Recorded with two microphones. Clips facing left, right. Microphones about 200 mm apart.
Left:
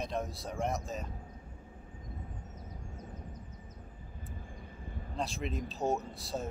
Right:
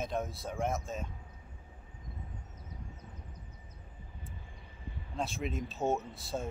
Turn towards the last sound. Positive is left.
turn(degrees=0)  # may be behind; listen again after turning